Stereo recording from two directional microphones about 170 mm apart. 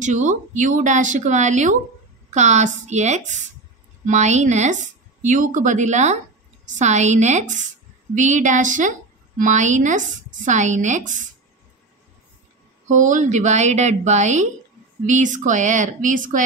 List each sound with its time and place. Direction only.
0.0 s a woman's voice: 45° right (ahead or behind)
12.8 s a woman's voice: 45° right (ahead or behind)